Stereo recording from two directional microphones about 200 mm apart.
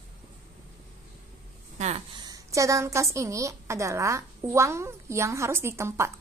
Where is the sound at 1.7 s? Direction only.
30° right (ahead or behind).